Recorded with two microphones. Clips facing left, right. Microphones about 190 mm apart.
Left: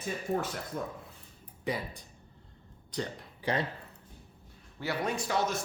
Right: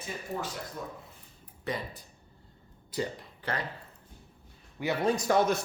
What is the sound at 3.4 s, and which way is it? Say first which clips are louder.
Speech: left 3 dB; 10° left (ahead or behind).